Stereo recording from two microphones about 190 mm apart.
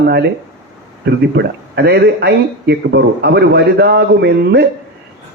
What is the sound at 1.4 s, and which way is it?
Speech, 60° right (ahead or behind).